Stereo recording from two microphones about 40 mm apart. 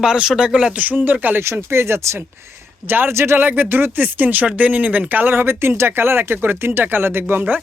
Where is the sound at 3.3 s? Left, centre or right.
Right.